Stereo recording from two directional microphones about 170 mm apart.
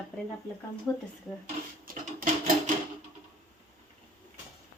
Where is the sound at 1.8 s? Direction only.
55° right (ahead or behind).